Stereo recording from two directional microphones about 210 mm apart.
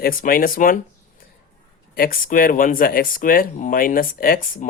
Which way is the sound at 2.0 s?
40° left (ahead or behind).